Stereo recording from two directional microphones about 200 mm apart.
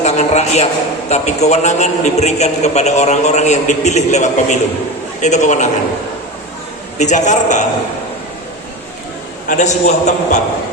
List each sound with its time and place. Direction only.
0.0 s a sound: 35° left (ahead or behind)
1.1 s a man's voice: 35° left (ahead or behind)
7.0 s a man's voice: 35° left (ahead or behind)
9.5 s a man's voice: 35° left (ahead or behind)